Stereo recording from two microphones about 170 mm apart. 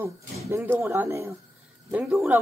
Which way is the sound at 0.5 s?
15° right (ahead or behind).